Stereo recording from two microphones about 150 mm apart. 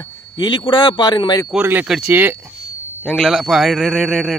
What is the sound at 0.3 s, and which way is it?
A man's voice, 30° left (ahead or behind).